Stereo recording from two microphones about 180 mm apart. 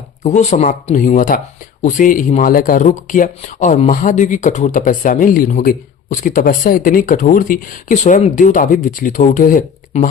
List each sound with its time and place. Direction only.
0.2 s speech: 40° left (ahead or behind)